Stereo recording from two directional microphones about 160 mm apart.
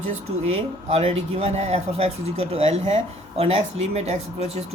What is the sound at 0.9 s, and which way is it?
Speech, 40° right (ahead or behind).